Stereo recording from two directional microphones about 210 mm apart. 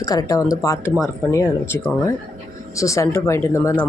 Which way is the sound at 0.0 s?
15° left (ahead or behind).